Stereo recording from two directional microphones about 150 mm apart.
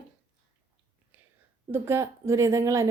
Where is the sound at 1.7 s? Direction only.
15° right (ahead or behind).